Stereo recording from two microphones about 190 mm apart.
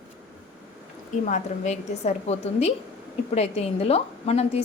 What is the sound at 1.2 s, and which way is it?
A woman's voice, 40° left (ahead or behind).